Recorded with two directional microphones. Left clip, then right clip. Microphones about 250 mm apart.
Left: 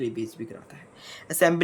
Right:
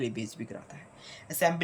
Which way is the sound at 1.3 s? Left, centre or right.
Centre.